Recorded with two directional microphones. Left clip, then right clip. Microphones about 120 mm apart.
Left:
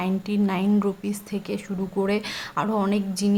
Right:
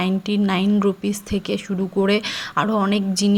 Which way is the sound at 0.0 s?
25° right (ahead or behind).